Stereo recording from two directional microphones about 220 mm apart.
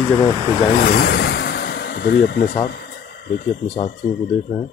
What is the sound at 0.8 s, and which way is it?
Vehicle, 45° left (ahead or behind).